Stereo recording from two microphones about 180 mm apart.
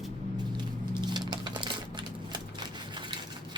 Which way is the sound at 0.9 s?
25° right (ahead or behind).